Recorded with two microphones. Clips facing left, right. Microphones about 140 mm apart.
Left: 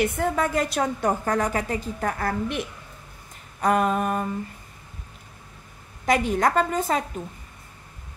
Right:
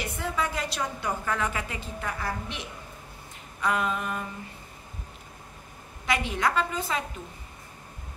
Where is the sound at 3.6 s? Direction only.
45° left (ahead or behind).